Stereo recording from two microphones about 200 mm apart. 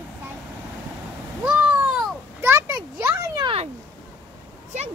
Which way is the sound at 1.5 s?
5° right (ahead or behind).